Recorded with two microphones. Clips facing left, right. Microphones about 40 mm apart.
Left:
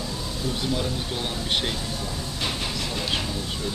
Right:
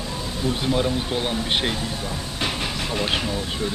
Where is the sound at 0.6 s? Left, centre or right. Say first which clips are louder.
Right 6 dB; right.